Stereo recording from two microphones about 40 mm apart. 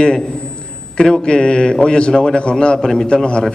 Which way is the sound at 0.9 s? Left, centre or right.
Centre.